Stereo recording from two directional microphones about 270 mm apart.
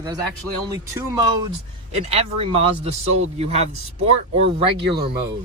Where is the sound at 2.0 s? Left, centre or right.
Right.